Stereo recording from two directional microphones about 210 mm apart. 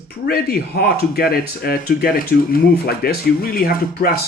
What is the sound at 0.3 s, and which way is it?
Speech, 45° left (ahead or behind).